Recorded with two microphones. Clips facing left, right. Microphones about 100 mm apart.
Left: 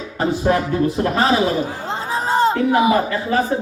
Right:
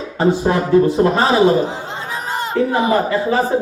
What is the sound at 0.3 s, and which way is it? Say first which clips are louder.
Speech: right 3 dB; 30° right (ahead or behind).